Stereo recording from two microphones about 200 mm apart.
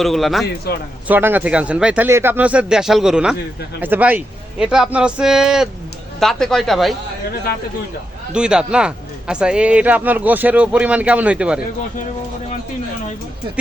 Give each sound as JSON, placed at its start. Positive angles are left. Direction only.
{"t": 0.0, "sound": "speech", "side_deg": 0}
{"t": 0.7, "sound": "a man's voice", "side_deg": 50}
{"t": 1.0, "sound": "speech", "side_deg": -10}
{"t": 8.3, "sound": "speech", "side_deg": -5}